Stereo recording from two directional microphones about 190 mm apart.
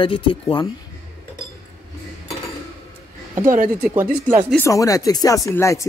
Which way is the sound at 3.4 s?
45° right (ahead or behind).